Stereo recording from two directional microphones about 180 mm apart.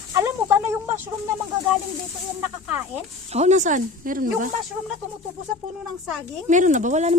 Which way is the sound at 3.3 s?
40° right (ahead or behind).